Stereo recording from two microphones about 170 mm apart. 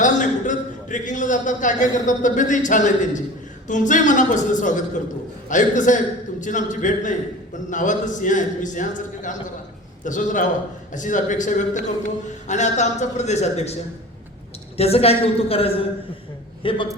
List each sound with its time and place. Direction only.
0.0 s a man's voice: 50° left (ahead or behind)
14.8 s a woman's voice: 35° left (ahead or behind)